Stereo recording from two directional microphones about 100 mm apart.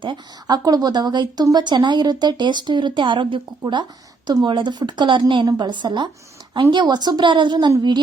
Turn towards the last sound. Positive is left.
turn(degrees=-45)  # may be behind; listen again after turning